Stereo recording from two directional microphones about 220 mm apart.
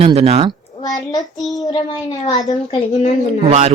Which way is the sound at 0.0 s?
25° right (ahead or behind).